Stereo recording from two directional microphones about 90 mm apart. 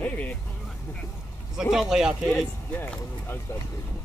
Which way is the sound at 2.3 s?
25° left (ahead or behind).